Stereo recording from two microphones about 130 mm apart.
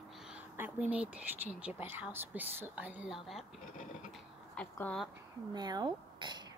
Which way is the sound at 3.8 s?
80° left.